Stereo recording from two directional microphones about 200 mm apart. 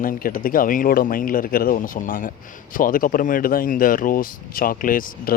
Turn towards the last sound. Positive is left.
turn(degrees=45)  # may be behind; listen again after turning